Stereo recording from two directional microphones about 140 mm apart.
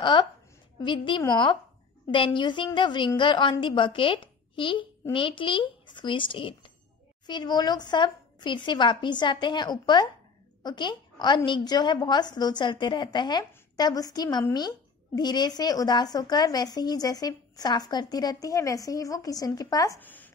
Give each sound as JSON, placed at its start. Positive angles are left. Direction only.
{"t": 0.0, "sound": "a woman's voice", "side_deg": 35}
{"t": 20.0, "sound": "speech", "side_deg": 10}